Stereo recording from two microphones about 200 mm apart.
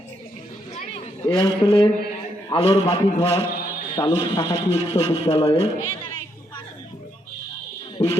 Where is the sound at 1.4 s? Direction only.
25° left (ahead or behind).